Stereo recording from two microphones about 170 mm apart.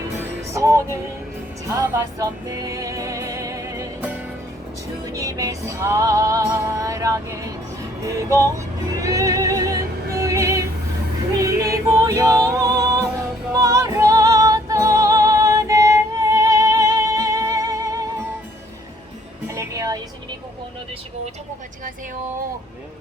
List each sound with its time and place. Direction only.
0.5 s music: 20° right (ahead or behind)
5.1 s music: 20° right (ahead or behind)
9.0 s music: 20° right (ahead or behind)
19.5 s music: 20° right (ahead or behind)